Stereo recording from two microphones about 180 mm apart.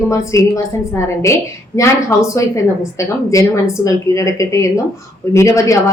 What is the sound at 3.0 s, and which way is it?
A woman's voice, 15° left (ahead or behind).